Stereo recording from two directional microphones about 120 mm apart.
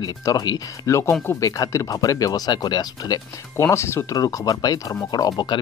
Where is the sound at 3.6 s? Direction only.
20° left (ahead or behind).